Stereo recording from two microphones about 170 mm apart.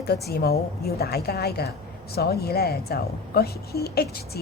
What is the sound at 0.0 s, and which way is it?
A woman's voice, 70° left (ahead or behind).